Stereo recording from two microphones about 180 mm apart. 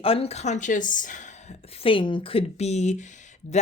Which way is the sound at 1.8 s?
30° left (ahead or behind).